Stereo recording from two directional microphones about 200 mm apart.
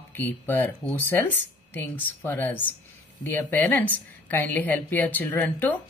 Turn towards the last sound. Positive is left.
turn(degrees=10)  # may be behind; listen again after turning